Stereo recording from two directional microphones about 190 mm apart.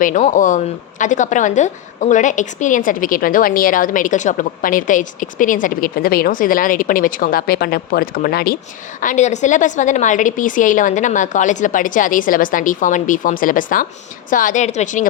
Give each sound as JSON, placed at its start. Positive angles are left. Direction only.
{"t": 0.0, "sound": "a woman's voice", "side_deg": 40}
{"t": 9.0, "sound": "a woman's voice", "side_deg": 40}